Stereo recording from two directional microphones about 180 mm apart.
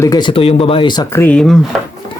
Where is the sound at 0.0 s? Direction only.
20° left (ahead or behind).